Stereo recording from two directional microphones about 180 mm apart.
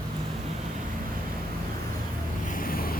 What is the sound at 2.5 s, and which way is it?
Waves, 55° left (ahead or behind).